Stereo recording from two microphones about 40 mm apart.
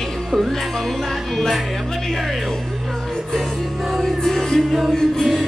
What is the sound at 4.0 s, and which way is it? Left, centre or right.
Music, centre.